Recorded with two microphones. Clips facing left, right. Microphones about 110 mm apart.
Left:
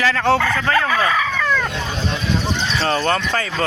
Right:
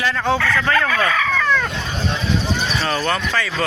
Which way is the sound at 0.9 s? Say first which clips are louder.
Left 1 dB; 15° left (ahead or behind).